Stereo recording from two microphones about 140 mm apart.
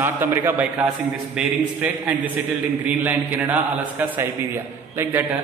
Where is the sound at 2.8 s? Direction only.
15° right (ahead or behind).